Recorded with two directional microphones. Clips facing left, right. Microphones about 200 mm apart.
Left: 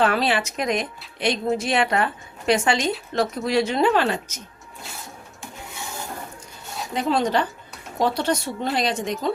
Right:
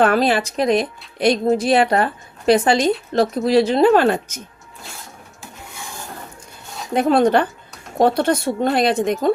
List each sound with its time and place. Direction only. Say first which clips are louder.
0.0 s a woman's voice: right 5 dB; 45° right (ahead or behind)
6.9 s speech: right 7 dB; 55° right (ahead or behind)